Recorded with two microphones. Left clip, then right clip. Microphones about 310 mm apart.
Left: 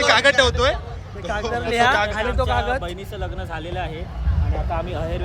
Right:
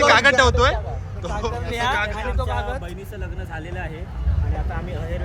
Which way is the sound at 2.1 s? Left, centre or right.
Left.